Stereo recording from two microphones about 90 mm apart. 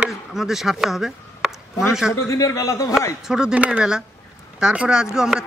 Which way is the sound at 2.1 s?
35° left (ahead or behind).